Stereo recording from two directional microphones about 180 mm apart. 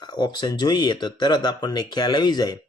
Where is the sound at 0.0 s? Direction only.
25° left (ahead or behind).